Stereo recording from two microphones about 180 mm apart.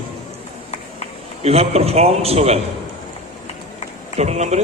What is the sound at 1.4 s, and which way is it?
A man's voice, 35° right (ahead or behind).